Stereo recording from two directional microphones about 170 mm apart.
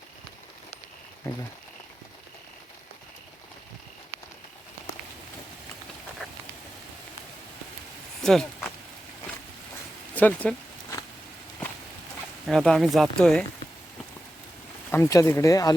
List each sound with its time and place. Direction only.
8.2 s a sound: 5° left (ahead or behind)
10.2 s speech: 10° left (ahead or behind)
12.5 s speech: centre (ahead or behind)
14.8 s speech: 15° left (ahead or behind)